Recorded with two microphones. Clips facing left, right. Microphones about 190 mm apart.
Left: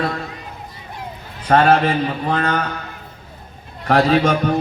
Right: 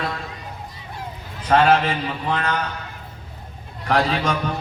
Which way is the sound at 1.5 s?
45° left (ahead or behind).